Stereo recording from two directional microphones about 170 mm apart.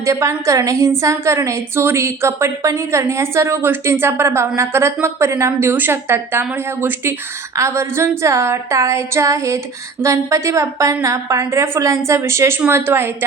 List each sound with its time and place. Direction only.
0.0 s a woman's voice: 20° right (ahead or behind)